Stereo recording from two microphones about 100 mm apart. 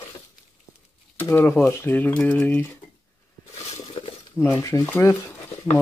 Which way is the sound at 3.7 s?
65° left (ahead or behind).